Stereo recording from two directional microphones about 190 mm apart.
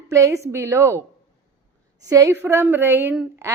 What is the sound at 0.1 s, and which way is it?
Speech, 15° right (ahead or behind).